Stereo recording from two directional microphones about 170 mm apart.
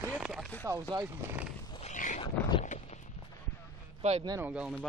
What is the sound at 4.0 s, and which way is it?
Speech, 40° right (ahead or behind).